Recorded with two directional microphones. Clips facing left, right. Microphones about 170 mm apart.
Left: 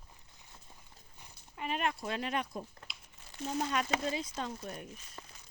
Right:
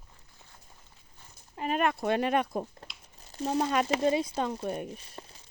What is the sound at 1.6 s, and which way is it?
A woman's voice, 50° right (ahead or behind).